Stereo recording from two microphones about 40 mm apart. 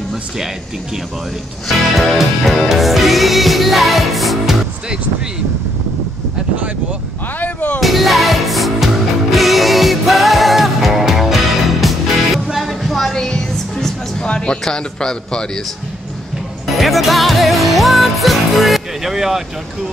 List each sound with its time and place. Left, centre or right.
2.0 s music: centre
7.3 s speech: left
7.8 s music: centre
13.1 s music: centre
14.2 s a sound: left
14.6 s a man's voice: centre
16.7 s music: centre